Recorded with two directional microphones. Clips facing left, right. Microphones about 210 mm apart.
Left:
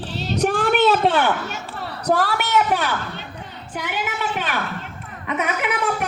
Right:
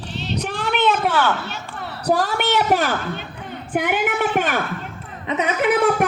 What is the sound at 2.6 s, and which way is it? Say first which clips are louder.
Speech: right 3 dB; 40° right (ahead or behind).